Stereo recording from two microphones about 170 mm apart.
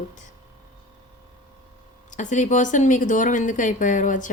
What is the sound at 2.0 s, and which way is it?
Speech, 45° left (ahead or behind).